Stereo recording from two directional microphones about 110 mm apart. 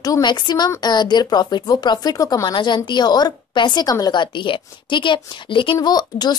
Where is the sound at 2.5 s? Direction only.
45° left (ahead or behind).